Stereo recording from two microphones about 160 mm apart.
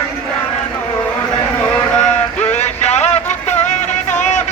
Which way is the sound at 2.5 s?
45° left (ahead or behind).